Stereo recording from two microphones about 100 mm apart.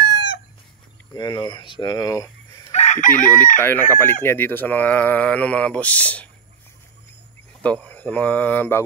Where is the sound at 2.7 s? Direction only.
90° left.